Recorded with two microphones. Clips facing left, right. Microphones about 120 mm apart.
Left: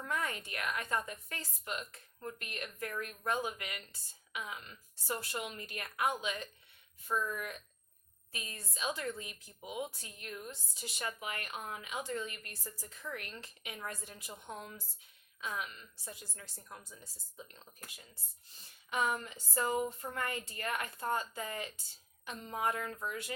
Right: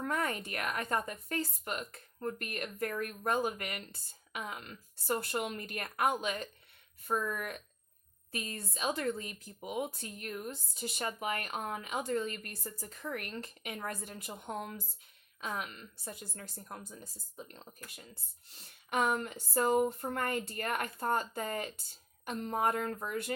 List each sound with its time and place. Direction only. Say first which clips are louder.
0.0 s a woman's voice: right 4 dB; 45° right (ahead or behind)
8.7 s a woman's voice: right 4 dB; 50° right (ahead or behind)
18.4 s a woman's voice: right 3 dB; 65° right (ahead or behind)